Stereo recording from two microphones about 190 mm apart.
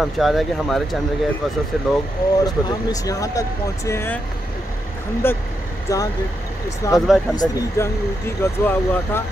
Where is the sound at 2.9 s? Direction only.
20° left (ahead or behind).